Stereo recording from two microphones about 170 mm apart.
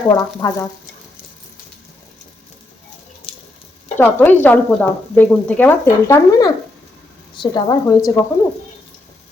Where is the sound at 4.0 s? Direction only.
10° left (ahead or behind).